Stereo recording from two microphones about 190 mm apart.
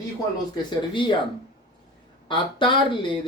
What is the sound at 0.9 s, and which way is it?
Speech, 25° left (ahead or behind).